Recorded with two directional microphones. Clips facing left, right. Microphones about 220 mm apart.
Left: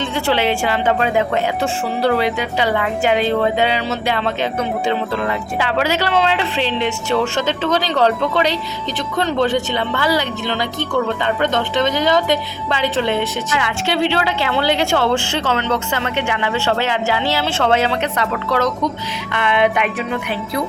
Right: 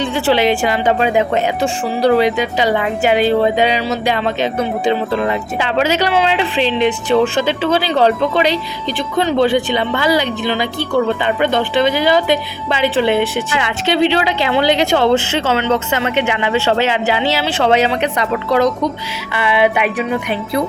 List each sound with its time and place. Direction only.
0.0 s a woman's voice: 15° right (ahead or behind)